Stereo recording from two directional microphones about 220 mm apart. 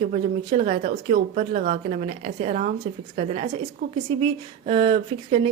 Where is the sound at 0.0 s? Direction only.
35° right (ahead or behind).